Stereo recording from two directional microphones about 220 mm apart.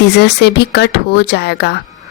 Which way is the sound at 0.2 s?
50° left (ahead or behind).